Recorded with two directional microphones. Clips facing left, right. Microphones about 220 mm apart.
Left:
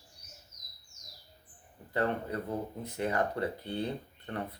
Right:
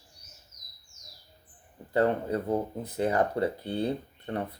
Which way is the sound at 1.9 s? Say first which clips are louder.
Right 6 dB; 30° right (ahead or behind).